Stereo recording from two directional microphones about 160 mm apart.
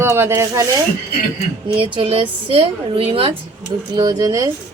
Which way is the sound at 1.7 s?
35° right (ahead or behind).